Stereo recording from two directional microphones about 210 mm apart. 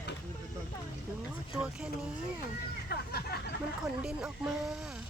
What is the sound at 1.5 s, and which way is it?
Speech, 5° right (ahead or behind).